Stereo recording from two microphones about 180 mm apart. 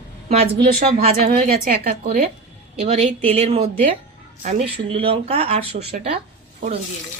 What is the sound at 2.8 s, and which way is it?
Speech, 40° right (ahead or behind).